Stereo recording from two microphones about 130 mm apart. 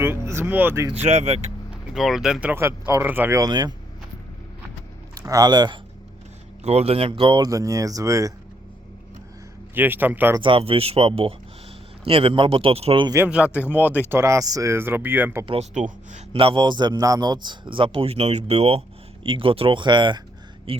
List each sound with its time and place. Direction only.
0.0 s speech: 20° right (ahead or behind)
1.0 s speech: 55° right (ahead or behind)
1.9 s speech: 5° right (ahead or behind)
2.6 s speech: 20° right (ahead or behind)
3.4 s speech: 30° right (ahead or behind)
5.1 s speech: 30° right (ahead or behind)
6.6 s speech: 55° right (ahead or behind); by 8.3 s 25° right (ahead or behind)
9.7 s speech: 15° right (ahead or behind)
10.4 s speech: 45° right (ahead or behind)
13.2 s speech: 10° right (ahead or behind)
13.7 s speech: 15° left (ahead or behind)
14.1 s speech: 20° right (ahead or behind)
16.1 s speech: 45° right (ahead or behind)
19.2 s speech: 40° right (ahead or behind)